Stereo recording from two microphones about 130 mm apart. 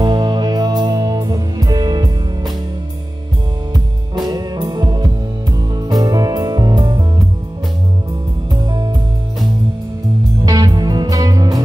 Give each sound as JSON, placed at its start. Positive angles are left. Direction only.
{"t": 0.0, "sound": "music", "side_deg": -35}
{"t": 3.7, "sound": "music", "side_deg": -30}
{"t": 8.5, "sound": "music", "side_deg": -35}
{"t": 10.4, "sound": "music", "side_deg": -30}